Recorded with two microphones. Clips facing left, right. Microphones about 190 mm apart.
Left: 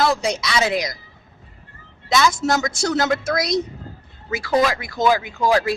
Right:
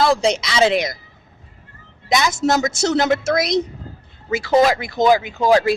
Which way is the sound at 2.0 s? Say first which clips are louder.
Right 1 dB; 20° right (ahead or behind).